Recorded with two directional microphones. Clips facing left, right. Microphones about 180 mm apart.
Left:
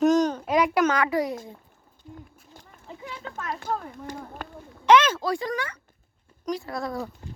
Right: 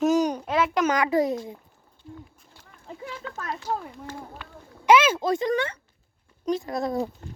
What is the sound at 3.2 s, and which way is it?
Speech, 35° left (ahead or behind).